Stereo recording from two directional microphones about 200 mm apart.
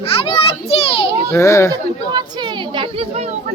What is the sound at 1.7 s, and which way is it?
Speech, 20° right (ahead or behind).